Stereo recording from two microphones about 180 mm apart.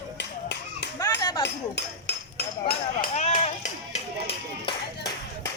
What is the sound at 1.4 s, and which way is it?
Speech, 70° left (ahead or behind).